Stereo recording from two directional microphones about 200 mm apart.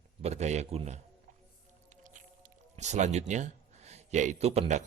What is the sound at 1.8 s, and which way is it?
Squish, 40° right (ahead or behind).